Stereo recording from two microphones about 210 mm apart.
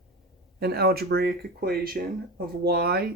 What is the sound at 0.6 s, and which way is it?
Speech, 50° right (ahead or behind).